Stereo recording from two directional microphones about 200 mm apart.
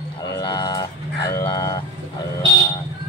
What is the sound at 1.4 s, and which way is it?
Vehicle, 20° left (ahead or behind).